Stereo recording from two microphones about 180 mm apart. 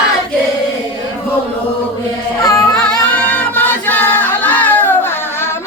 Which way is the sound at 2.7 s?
5° left (ahead or behind).